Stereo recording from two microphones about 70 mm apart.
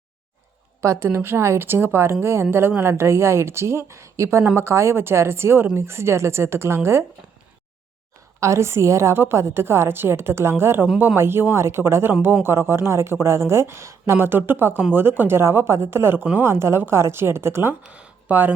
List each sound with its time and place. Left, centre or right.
0.8 s a woman's voice: right
8.4 s a woman's voice: right
17.8 s speech: centre